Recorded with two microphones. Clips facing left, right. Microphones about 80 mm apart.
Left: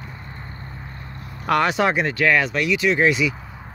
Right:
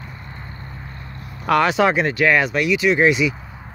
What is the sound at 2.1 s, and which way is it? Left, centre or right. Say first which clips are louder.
Speech: right 2 dB; centre.